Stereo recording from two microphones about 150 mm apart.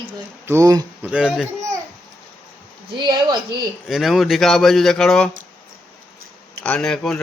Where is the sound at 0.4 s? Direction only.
20° right (ahead or behind).